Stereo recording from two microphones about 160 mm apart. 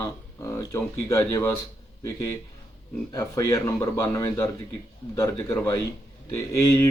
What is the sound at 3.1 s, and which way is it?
Speech, 20° left (ahead or behind).